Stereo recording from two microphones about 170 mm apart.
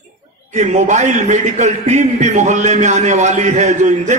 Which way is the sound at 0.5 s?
45° right (ahead or behind).